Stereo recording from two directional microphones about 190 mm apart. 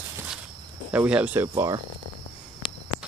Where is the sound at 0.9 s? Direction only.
5° right (ahead or behind).